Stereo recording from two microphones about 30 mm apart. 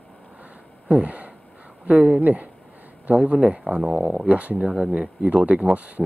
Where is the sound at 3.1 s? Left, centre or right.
Right.